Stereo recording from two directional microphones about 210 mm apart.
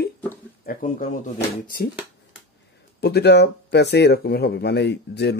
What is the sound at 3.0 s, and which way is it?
Speech, 50° left (ahead or behind).